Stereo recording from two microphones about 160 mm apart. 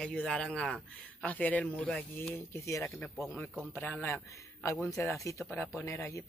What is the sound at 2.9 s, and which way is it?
Speech, centre (ahead or behind).